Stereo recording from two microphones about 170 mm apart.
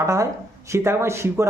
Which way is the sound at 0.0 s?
20° right (ahead or behind).